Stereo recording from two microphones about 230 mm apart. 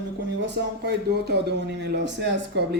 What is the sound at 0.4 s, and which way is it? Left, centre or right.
A man's voice, right.